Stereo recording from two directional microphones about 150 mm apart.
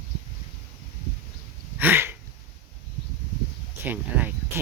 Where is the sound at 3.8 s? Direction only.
10° right (ahead or behind).